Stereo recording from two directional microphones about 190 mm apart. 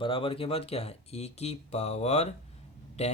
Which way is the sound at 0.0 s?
30° left (ahead or behind).